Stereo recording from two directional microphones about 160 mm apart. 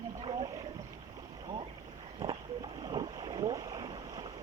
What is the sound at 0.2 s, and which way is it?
Boat, 30° right (ahead or behind).